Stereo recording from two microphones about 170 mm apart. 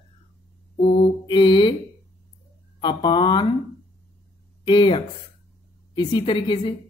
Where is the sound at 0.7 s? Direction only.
30° left (ahead or behind).